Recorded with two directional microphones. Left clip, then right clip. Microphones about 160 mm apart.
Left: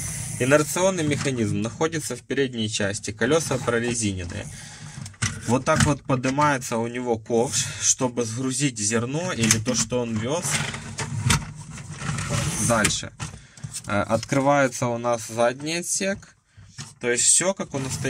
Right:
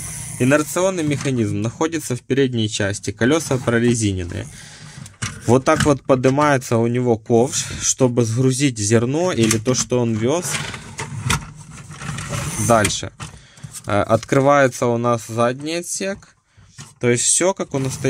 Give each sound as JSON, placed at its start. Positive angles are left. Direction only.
{"t": 0.4, "sound": "speech", "side_deg": -25}
{"t": 5.5, "sound": "speech", "side_deg": -50}
{"t": 12.6, "sound": "speech", "side_deg": -30}
{"t": 17.0, "sound": "speech", "side_deg": -35}